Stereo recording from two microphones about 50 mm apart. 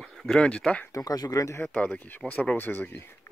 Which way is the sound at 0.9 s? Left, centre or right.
Left.